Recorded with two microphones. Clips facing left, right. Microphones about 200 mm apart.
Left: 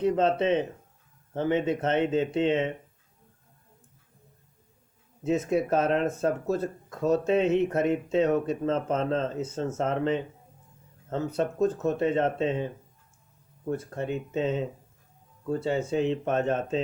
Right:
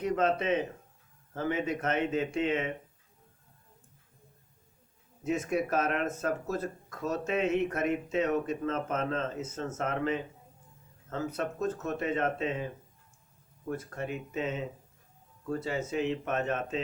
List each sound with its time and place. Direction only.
0.0 s speech: 30° left (ahead or behind)
5.5 s speech: 30° left (ahead or behind)
13.7 s speech: 30° left (ahead or behind)